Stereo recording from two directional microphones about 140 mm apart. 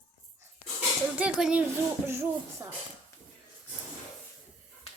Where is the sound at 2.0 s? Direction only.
20° right (ahead or behind).